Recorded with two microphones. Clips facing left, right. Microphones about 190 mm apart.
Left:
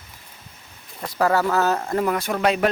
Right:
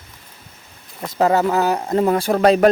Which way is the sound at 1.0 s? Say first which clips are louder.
Right 4 dB; 20° right (ahead or behind).